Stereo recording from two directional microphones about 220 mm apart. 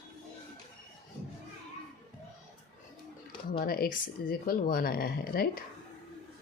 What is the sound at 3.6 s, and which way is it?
Speech, 40° left (ahead or behind).